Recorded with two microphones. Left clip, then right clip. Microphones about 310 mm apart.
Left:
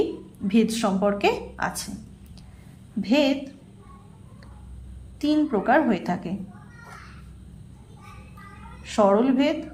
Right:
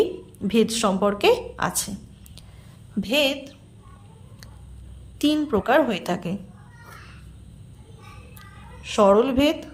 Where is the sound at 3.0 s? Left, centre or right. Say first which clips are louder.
Even; right.